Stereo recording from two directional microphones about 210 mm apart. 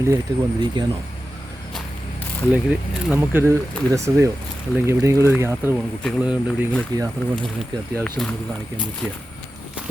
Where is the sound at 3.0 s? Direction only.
10° right (ahead or behind).